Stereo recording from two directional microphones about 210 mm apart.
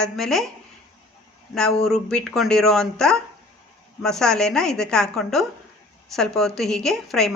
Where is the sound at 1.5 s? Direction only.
Centre (ahead or behind).